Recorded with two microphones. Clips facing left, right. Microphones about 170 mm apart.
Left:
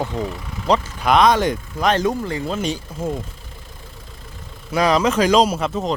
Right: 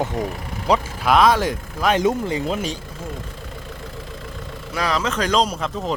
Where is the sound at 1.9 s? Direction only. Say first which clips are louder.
Right 1 dB; 20° right (ahead or behind).